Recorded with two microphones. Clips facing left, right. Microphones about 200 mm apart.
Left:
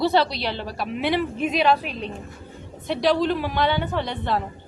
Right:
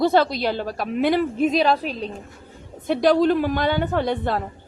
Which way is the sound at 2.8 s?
50° right (ahead or behind).